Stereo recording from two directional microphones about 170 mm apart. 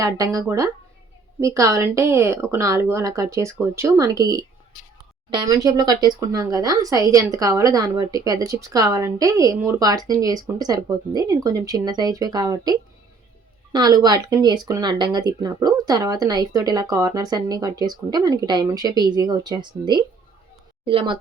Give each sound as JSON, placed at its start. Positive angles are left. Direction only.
{"t": 0.0, "sound": "speech", "side_deg": -20}